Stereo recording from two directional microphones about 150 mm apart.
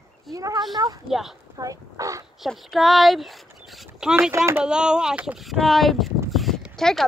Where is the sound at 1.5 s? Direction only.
25° right (ahead or behind).